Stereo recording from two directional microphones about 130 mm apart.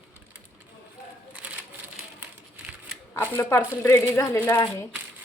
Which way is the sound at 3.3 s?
15° left (ahead or behind).